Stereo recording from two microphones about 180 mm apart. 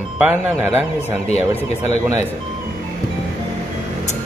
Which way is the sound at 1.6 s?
40° left (ahead or behind).